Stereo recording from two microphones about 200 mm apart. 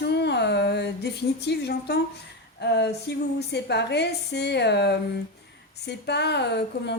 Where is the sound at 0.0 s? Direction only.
60° left (ahead or behind).